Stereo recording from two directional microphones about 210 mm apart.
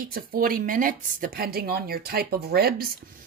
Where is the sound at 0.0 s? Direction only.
45° right (ahead or behind).